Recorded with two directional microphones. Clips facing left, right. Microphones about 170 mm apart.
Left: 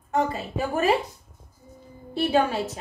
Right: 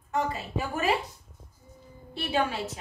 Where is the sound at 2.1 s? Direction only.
45° left (ahead or behind).